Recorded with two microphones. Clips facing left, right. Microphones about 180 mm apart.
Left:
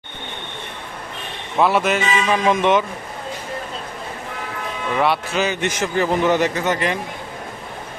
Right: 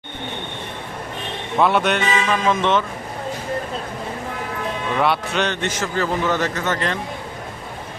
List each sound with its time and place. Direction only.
1.5 s speech: centre (ahead or behind)
2.3 s a man's voice: 15° left (ahead or behind)
4.9 s speech: centre (ahead or behind)
5.6 s a man's voice: 15° left (ahead or behind)